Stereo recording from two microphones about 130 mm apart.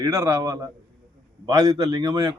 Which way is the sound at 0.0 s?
25° right (ahead or behind).